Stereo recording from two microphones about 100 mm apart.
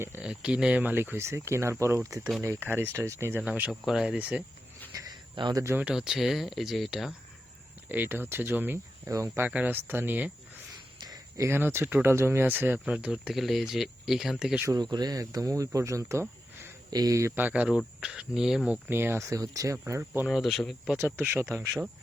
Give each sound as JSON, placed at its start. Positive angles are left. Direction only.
{"t": 0.2, "sound": "speech", "side_deg": -10}
{"t": 3.4, "sound": "speech", "side_deg": -10}
{"t": 4.9, "sound": "a sound", "side_deg": -40}
{"t": 5.3, "sound": "speech", "side_deg": -50}
{"t": 5.9, "sound": "speech", "side_deg": -5}
{"t": 7.9, "sound": "speech", "side_deg": -20}
{"t": 9.5, "sound": "speech", "side_deg": -15}
{"t": 10.9, "sound": "a sound", "side_deg": -40}
{"t": 11.4, "sound": "speech", "side_deg": -25}
{"t": 14.7, "sound": "speech", "side_deg": -45}
{"t": 17.3, "sound": "speech", "side_deg": -15}
{"t": 18.9, "sound": "speech", "side_deg": -25}
{"t": 20.2, "sound": "speech", "side_deg": 0}
{"t": 21.2, "sound": "speech", "side_deg": -20}